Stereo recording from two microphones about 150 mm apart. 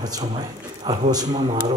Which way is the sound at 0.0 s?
25° right (ahead or behind).